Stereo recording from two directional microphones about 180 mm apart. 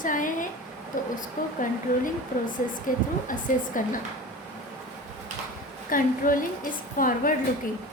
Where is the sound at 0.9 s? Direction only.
45° left (ahead or behind).